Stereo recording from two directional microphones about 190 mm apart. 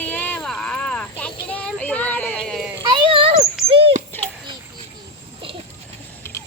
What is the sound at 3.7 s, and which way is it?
Dog, 30° right (ahead or behind).